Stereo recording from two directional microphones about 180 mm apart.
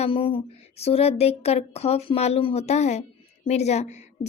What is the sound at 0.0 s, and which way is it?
A woman's voice, 30° left (ahead or behind).